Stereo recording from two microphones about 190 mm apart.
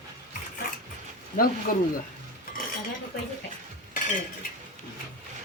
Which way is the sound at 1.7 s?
50° left (ahead or behind).